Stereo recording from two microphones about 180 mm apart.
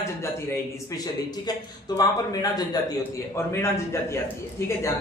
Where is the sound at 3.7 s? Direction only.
15° left (ahead or behind).